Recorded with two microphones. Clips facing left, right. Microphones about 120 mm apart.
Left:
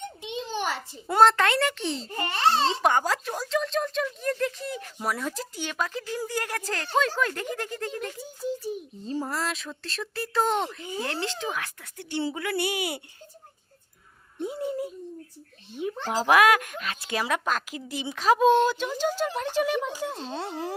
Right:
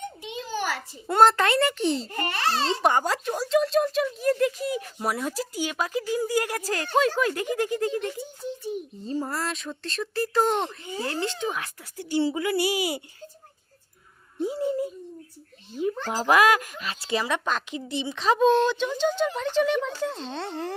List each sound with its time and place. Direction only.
0.2 s a sound: 25° left (ahead or behind)
1.0 s speech: centre (ahead or behind)
2.1 s speech: 25° left (ahead or behind)
2.8 s speech: centre (ahead or behind)
14.4 s speech: centre (ahead or behind)